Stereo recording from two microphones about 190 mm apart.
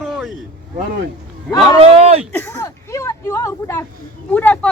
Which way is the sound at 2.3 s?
10° left (ahead or behind).